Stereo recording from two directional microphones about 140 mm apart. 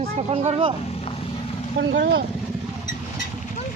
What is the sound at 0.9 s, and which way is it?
Vehicle, 45° left (ahead or behind).